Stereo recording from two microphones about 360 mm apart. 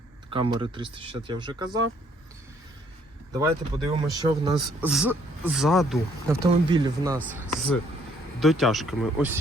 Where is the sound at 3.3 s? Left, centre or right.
Centre.